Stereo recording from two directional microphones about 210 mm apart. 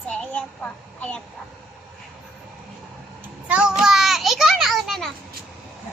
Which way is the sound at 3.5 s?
5° right (ahead or behind).